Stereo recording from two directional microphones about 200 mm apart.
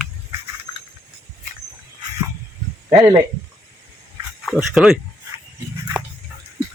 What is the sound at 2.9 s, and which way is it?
Speech, 20° right (ahead or behind).